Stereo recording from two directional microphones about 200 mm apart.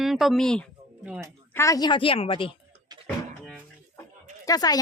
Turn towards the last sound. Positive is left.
turn(degrees=20)  # may be behind; listen again after turning